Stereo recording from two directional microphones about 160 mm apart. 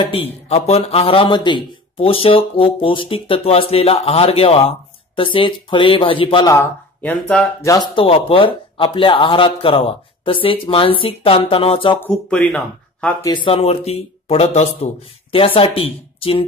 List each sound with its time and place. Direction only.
0.0 s a man's voice: 35° left (ahead or behind)
6.5 s speech: 15° left (ahead or behind)
7.9 s a man's voice: 35° left (ahead or behind)
12.0 s speech: 5° left (ahead or behind)
13.2 s a man's voice: 30° left (ahead or behind)